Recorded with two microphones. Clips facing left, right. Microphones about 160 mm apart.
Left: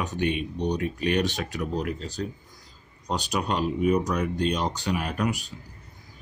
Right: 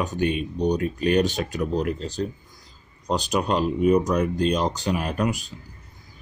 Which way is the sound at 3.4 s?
30° right (ahead or behind).